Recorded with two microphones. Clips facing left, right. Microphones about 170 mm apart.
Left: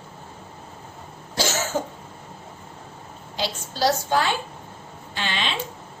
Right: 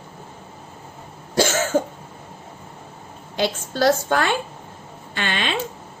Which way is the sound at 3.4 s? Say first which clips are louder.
Right 4 dB; 55° right (ahead or behind).